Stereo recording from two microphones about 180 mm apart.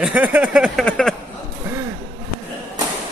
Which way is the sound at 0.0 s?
10° right (ahead or behind).